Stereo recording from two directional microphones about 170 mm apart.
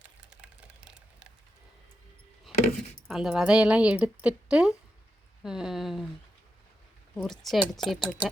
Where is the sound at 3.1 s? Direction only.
5° right (ahead or behind).